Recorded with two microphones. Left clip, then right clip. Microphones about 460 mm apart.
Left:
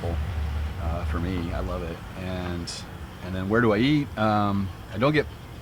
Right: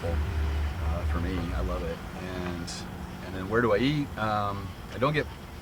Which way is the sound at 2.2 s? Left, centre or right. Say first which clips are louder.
Left 3 dB; left.